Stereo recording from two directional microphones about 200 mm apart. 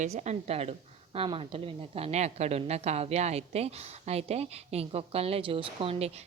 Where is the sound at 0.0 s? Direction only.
35° right (ahead or behind).